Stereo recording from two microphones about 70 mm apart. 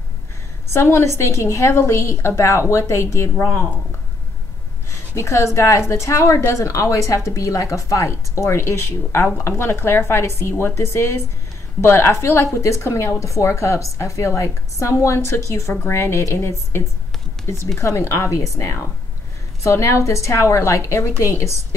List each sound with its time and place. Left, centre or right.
0.7 s a woman's voice: left
5.1 s a woman's voice: left